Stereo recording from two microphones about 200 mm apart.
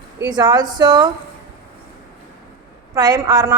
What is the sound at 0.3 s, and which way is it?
Speech, 20° right (ahead or behind).